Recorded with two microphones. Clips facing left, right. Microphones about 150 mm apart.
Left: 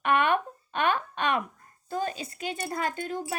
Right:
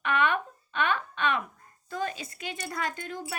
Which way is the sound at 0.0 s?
40° left (ahead or behind).